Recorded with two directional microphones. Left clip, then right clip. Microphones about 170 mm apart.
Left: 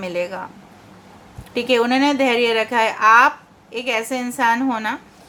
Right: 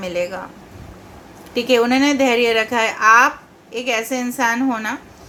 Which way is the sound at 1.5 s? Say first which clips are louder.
Right 2 dB; 20° left (ahead or behind).